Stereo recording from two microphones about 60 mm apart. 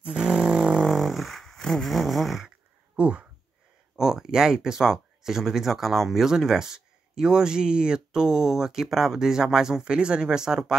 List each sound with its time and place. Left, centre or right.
0.1 s didgeridoo: centre
0.9 s fart: centre
3.0 s speech: right
3.9 s speech: centre